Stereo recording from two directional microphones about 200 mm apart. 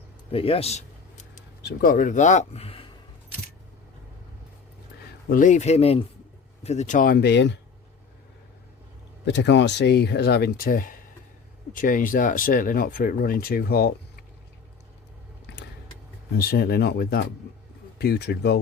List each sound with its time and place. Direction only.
0.3 s a man's voice: 30° left (ahead or behind)
1.6 s speech: 45° left (ahead or behind); by 2.9 s 30° left (ahead or behind)
5.3 s speech: 40° left (ahead or behind); by 7.6 s 60° left (ahead or behind)
9.2 s speech: 60° left (ahead or behind)
16.3 s speech: 50° left (ahead or behind)